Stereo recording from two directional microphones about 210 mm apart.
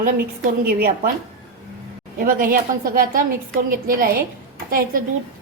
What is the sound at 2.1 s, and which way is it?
A woman's voice, 40° right (ahead or behind).